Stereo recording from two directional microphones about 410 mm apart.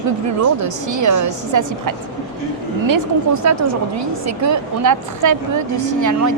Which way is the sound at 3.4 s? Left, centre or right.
Right.